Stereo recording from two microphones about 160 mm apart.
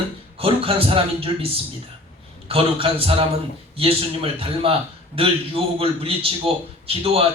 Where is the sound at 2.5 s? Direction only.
35° right (ahead or behind).